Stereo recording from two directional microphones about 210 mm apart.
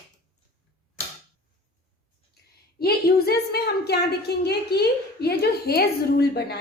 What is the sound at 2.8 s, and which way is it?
A woman's voice, 50° left (ahead or behind).